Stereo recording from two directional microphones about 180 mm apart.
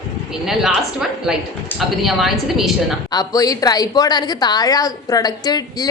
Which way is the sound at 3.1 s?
20° left (ahead or behind).